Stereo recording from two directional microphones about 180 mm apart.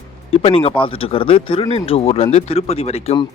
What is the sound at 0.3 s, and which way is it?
Speech, 35° left (ahead or behind).